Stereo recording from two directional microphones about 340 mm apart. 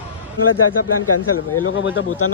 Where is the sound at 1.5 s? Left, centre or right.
Left.